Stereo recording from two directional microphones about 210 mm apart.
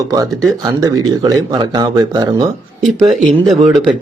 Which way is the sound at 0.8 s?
15° right (ahead or behind).